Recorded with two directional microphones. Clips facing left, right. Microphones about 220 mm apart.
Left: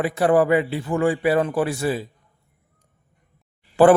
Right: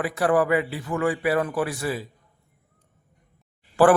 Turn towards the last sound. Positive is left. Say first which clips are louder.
# left 3 dB
turn(degrees=20)  # may be behind; listen again after turning